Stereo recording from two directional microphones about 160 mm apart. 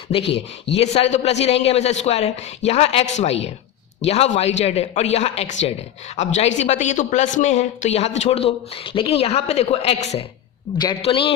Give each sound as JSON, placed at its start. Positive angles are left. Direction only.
{"t": 0.8, "sound": "a man's voice", "side_deg": 40}